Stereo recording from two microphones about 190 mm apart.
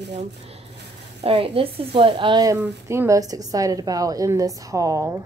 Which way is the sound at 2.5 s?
10° right (ahead or behind).